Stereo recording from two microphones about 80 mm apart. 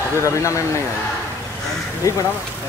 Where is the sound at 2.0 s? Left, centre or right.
Left.